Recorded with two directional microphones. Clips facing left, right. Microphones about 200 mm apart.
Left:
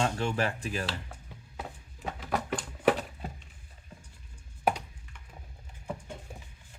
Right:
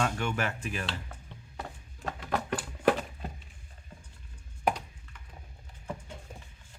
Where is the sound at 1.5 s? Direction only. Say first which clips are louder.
Even; centre (ahead or behind).